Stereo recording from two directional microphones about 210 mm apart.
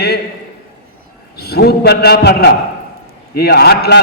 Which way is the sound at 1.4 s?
50° left (ahead or behind).